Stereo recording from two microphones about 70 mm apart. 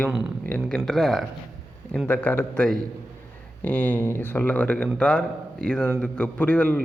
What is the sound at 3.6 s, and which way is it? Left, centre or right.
A man's voice, left.